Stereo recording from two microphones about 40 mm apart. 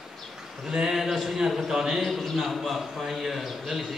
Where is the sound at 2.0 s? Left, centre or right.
Centre.